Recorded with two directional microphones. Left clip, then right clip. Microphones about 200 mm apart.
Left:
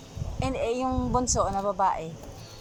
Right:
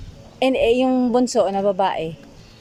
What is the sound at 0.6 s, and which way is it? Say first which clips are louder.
A woman's voice: right 9 dB; 45° right (ahead or behind).